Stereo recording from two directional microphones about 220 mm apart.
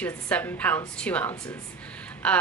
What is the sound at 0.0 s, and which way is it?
A woman's voice, 5° left (ahead or behind).